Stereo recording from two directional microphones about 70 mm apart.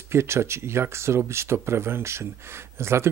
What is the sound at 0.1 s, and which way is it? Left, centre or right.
Speech, right.